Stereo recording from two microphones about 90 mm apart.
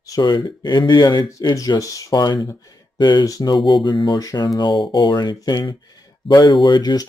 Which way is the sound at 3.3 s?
45° left (ahead or behind).